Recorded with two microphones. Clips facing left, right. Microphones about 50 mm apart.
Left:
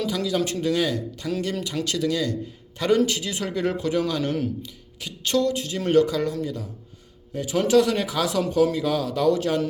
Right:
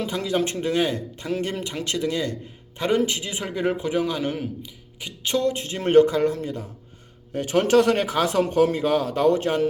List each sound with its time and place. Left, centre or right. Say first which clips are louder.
0.0 s speech: even; right